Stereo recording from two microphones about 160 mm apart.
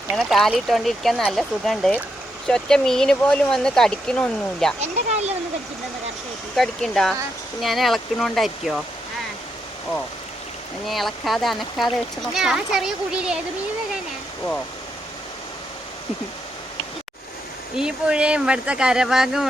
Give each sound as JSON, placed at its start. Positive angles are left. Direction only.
{"t": 0.2, "sound": "speech", "side_deg": 0}
{"t": 4.8, "sound": "speech", "side_deg": -45}
{"t": 6.6, "sound": "speech", "side_deg": 5}
{"t": 10.8, "sound": "speech", "side_deg": 0}
{"t": 17.7, "sound": "speech", "side_deg": -5}